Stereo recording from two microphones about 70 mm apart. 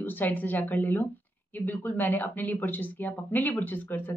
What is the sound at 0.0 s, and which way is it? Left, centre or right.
A woman's voice, left.